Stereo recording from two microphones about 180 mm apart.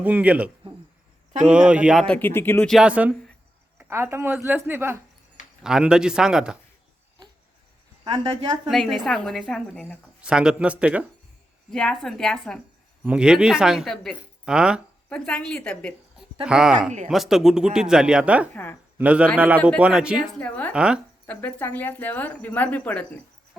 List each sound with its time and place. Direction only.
0.0 s a woman's voice: 10° right (ahead or behind)
2.1 s speech: 10° left (ahead or behind)
2.7 s a woman's voice: 5° right (ahead or behind)
8.0 s a woman's voice: 25° right (ahead or behind)
8.7 s a woman's voice: centre (ahead or behind)
11.7 s speech: 5° left (ahead or behind)
18.5 s speech: 10° left (ahead or behind)
18.9 s a woman's voice: 5° right (ahead or behind)
20.4 s speech: 10° left (ahead or behind)
20.7 s speech: 5° right (ahead or behind)
21.2 s speech: 10° left (ahead or behind)